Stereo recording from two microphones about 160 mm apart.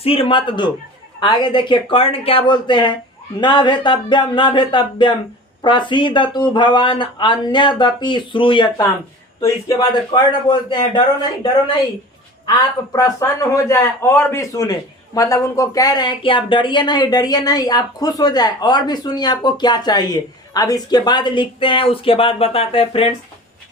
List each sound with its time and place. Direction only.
0.0 s a man's voice: 35° left (ahead or behind)
12.5 s a man's voice: 20° left (ahead or behind)